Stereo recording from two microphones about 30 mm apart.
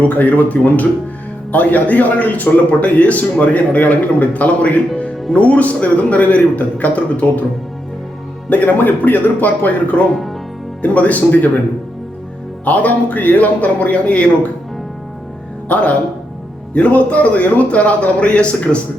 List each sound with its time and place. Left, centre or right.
0.1 s a man's voice: left
8.4 s a man's voice: left
12.6 s a man's voice: left
15.7 s a man's voice: left